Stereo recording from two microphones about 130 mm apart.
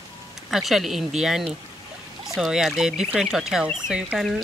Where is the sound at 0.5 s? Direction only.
Centre (ahead or behind).